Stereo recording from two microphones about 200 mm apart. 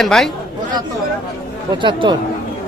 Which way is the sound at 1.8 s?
25° right (ahead or behind).